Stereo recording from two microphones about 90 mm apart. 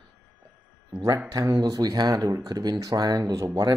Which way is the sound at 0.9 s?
45° right (ahead or behind).